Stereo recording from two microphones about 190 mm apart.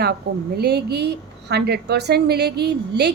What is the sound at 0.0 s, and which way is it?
A woman's voice, 55° right (ahead or behind).